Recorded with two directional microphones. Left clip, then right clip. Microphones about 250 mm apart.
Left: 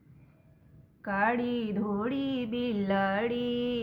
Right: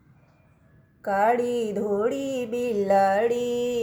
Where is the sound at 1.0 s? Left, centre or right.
Centre.